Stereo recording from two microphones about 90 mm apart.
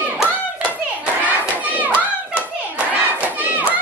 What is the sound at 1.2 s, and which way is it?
Children playing, 15° right (ahead or behind).